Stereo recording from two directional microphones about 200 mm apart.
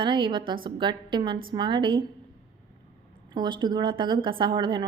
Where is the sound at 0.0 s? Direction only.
25° right (ahead or behind).